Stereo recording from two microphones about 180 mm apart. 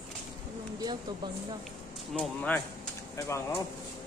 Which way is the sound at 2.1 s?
5° left (ahead or behind).